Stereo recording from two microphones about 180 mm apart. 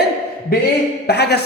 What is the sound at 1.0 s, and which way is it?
Speech, 65° left (ahead or behind).